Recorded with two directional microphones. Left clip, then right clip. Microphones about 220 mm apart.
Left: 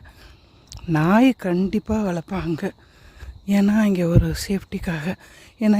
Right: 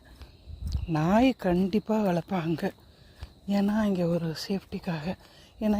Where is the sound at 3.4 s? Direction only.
35° left (ahead or behind).